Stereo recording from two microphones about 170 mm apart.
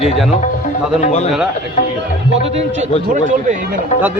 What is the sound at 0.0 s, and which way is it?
Speech, centre (ahead or behind).